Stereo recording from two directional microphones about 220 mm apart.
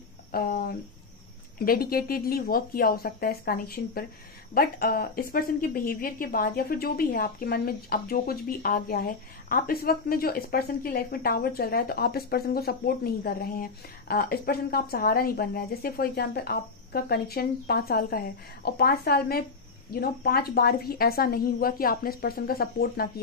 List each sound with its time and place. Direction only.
0.3 s speech: 40° left (ahead or behind)
1.6 s speech: 40° left (ahead or behind)